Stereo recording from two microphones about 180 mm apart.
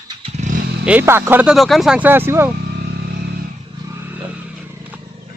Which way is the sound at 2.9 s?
65° right (ahead or behind).